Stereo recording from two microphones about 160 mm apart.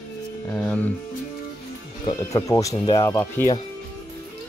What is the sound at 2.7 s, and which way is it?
Speech, 30° left (ahead or behind).